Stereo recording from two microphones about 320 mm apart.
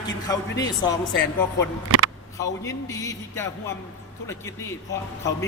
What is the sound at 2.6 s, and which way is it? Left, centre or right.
Speech, centre.